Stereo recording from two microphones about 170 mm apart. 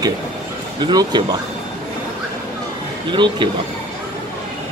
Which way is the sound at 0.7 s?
25° right (ahead or behind).